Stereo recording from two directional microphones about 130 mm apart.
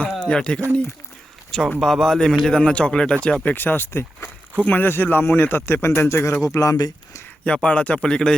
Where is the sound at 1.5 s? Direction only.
5° left (ahead or behind); by 7.3 s 25° left (ahead or behind).